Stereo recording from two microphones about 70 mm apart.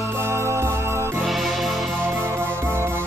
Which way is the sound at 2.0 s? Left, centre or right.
Right.